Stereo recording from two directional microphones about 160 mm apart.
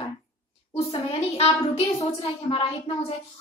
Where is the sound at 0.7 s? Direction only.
35° left (ahead or behind).